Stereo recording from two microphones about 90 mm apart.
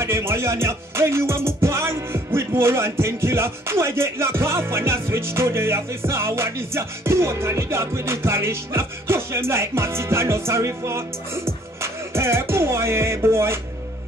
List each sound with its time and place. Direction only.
0.0 s music: 30° right (ahead or behind)